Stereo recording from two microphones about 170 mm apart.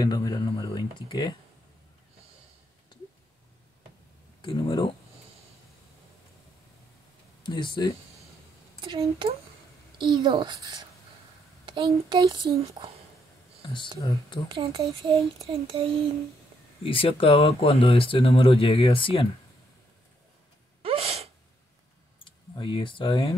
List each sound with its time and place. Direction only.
0.0 s speech: 20° left (ahead or behind)
4.4 s speech: 30° left (ahead or behind)
7.4 s speech: 25° left (ahead or behind)
8.8 s a woman's voice: 30° right (ahead or behind)
13.9 s speech: 20° left (ahead or behind)
14.5 s speech: 30° right (ahead or behind)
16.8 s speech: 30° left (ahead or behind)
20.8 s sneeze: 35° right (ahead or behind)
22.2 s speech: 30° left (ahead or behind)